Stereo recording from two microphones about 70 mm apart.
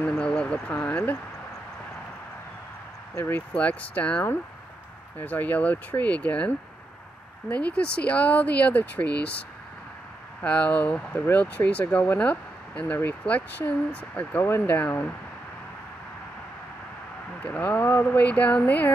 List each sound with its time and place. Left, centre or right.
0.2 s speech: centre
3.2 s speech: left
10.4 s speech: centre
17.4 s speech: centre